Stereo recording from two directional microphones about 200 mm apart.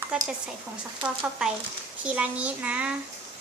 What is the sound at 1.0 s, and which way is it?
A child's voice, 5° right (ahead or behind).